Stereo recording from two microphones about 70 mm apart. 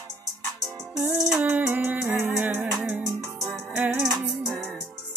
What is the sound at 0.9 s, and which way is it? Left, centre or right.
Music, centre.